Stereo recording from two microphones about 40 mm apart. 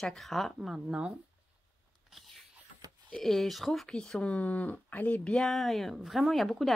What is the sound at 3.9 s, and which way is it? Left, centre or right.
Speech, centre.